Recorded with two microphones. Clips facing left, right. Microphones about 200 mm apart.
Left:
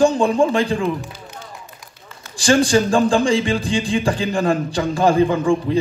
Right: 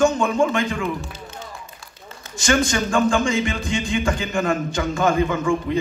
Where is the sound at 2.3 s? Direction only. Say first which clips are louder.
Left 5 dB; 35° left (ahead or behind).